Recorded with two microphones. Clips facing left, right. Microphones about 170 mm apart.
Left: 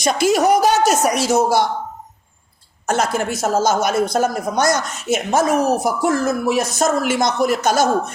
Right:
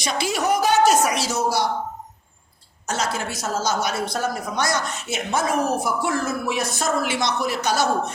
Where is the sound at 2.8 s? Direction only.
55° left (ahead or behind).